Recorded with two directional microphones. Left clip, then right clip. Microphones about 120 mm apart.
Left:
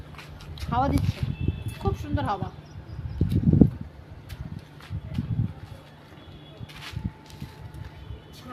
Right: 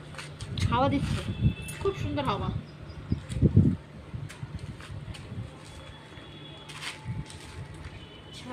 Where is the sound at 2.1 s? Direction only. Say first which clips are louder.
Left 5 dB; 35° left (ahead or behind).